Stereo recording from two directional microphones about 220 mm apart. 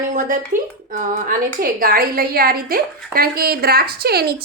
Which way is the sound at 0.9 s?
35° right (ahead or behind).